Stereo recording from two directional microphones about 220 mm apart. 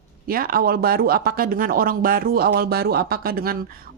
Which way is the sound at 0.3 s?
40° right (ahead or behind).